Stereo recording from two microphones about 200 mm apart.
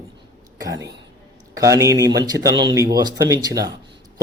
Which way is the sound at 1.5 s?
15° right (ahead or behind).